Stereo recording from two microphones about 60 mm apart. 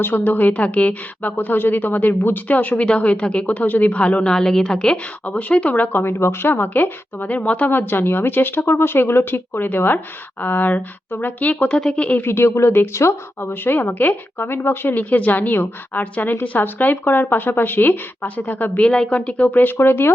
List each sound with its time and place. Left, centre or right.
0.0 s a woman's voice: left
3.4 s a woman's voice: left; by 4.9 s centre
5.2 s speech: left
7.7 s speech: left
11.7 s speech: centre
12.2 s speech: left
13.5 s speech: left
18.8 s speech: centre; by 20.1 s left